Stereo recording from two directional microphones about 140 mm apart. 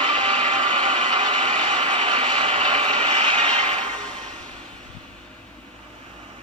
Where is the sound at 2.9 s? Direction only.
45° right (ahead or behind).